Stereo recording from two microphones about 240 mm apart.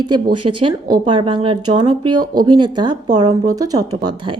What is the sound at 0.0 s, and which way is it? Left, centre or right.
A woman's voice, centre.